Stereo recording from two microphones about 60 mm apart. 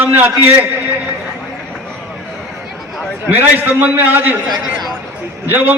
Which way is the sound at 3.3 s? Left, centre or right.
Right.